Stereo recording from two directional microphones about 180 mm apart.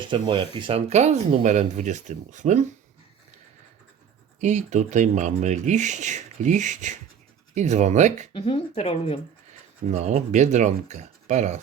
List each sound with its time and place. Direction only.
0.1 s speech: 25° right (ahead or behind); by 2.6 s 40° right (ahead or behind)
4.4 s speech: 40° right (ahead or behind)
8.3 s speech: 30° left (ahead or behind)
9.9 s speech: 40° right (ahead or behind)